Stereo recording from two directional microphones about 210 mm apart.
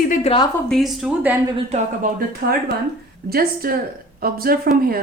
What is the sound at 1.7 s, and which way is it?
A woman's voice, 40° right (ahead or behind).